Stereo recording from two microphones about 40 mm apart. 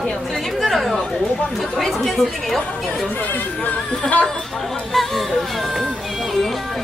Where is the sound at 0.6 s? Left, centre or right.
Centre.